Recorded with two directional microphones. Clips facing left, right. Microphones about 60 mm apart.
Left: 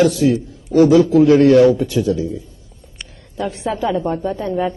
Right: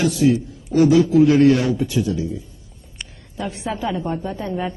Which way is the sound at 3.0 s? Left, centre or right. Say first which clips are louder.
Left 4 dB; centre.